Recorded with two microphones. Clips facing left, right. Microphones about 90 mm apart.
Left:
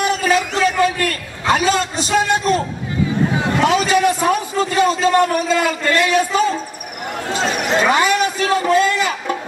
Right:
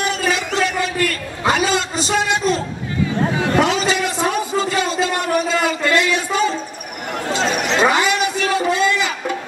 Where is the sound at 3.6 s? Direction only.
45° left (ahead or behind).